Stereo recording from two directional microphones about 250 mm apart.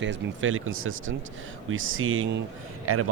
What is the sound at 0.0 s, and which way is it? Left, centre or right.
Speech, right.